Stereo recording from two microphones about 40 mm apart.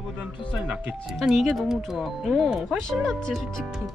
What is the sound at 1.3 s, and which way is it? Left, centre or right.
Speech, centre.